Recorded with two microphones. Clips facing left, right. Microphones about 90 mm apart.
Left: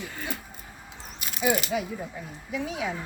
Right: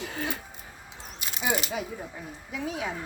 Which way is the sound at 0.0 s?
70° right (ahead or behind).